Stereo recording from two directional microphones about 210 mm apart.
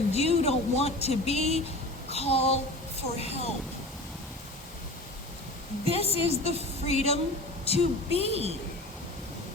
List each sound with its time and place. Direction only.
0.1 s speech: 30° left (ahead or behind)
2.0 s a sound: 30° left (ahead or behind)
3.2 s speech: 30° left (ahead or behind)
5.8 s a woman's voice: 30° right (ahead or behind)
6.8 s speech: 30° left (ahead or behind)
8.2 s a woman's voice: 30° right (ahead or behind)